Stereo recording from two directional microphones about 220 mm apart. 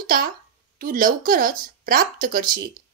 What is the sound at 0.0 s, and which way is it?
A woman's voice, 40° right (ahead or behind).